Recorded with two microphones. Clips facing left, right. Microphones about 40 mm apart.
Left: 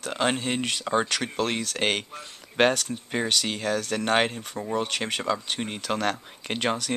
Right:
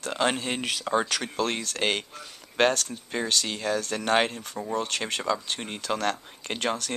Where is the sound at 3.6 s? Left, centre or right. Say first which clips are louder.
Left 1 dB; centre.